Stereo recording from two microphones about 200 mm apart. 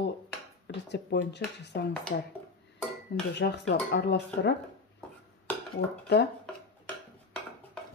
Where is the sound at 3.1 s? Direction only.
60° left (ahead or behind).